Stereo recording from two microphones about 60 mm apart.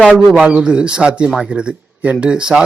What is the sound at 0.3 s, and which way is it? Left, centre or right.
Speech, centre.